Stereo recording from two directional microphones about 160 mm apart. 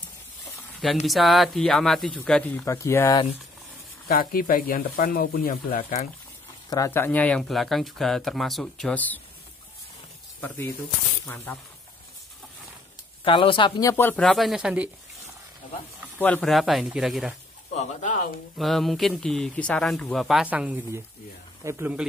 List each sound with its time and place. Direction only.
1.0 s speech: centre (ahead or behind); by 3.2 s 15° left (ahead or behind)
4.1 s speech: 65° left (ahead or behind)
6.7 s speech: 20° left (ahead or behind)
11.2 s speech: 15° left (ahead or behind)
13.2 s speech: 35° left (ahead or behind); by 14.2 s 15° left (ahead or behind)
14.2 s speech: centre (ahead or behind)
16.2 s speech: 5° left (ahead or behind)
17.7 s speech: 50° left (ahead or behind)
18.6 s speech: centre (ahead or behind)